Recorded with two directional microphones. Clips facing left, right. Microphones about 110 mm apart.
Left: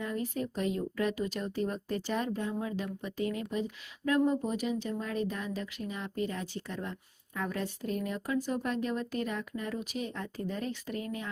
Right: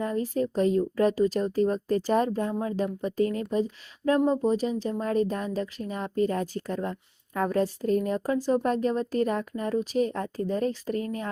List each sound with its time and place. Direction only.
0.0 s speech: 35° right (ahead or behind)